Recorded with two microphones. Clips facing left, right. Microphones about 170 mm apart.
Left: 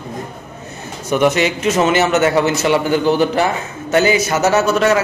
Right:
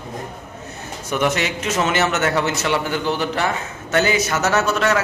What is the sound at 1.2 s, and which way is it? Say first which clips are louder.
A man's voice: left 6 dB; 5° left (ahead or behind).